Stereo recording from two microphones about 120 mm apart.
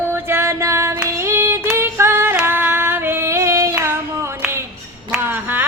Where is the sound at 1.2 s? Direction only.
25° right (ahead or behind).